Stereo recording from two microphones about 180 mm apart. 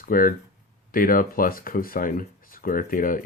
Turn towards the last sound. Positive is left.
turn(degrees=50)  # may be behind; listen again after turning